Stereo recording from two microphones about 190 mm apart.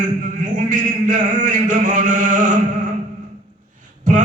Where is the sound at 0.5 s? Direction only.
45° right (ahead or behind).